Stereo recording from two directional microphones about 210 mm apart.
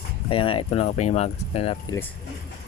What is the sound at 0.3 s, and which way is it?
Speech, 25° left (ahead or behind).